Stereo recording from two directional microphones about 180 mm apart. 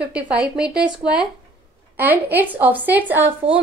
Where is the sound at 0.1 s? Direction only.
5° right (ahead or behind).